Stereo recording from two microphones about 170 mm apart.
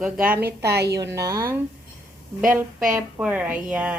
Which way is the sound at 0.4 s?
75° right (ahead or behind).